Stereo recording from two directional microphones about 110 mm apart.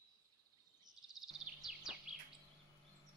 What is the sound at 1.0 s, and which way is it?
Bird vocalization, 5° right (ahead or behind).